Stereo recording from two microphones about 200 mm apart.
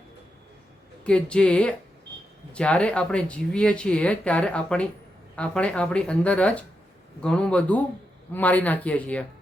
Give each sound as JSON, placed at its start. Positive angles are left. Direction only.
{"t": 1.0, "sound": "speech", "side_deg": 5}